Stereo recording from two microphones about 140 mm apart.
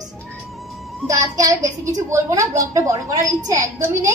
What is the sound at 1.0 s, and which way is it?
A woman's voice, 25° right (ahead or behind).